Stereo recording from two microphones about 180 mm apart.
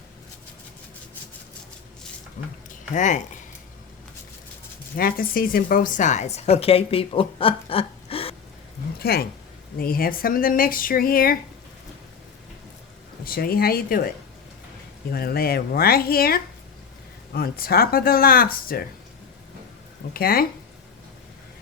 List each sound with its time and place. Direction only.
2.4 s speech: 50° left (ahead or behind)
4.9 s a woman's voice: 55° left (ahead or behind); by 8.4 s 30° left (ahead or behind)
9.0 s speech: 60° left (ahead or behind)
13.2 s speech: 55° left (ahead or behind)
15.1 s speech: 60° left (ahead or behind)
20.1 s speech: 55° left (ahead or behind)